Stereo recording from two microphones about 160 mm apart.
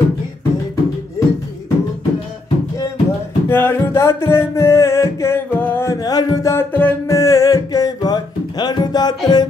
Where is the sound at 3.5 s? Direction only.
15° left (ahead or behind).